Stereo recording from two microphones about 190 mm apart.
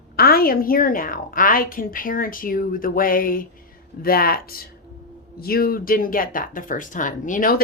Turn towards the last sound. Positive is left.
turn(degrees=45)  # may be behind; listen again after turning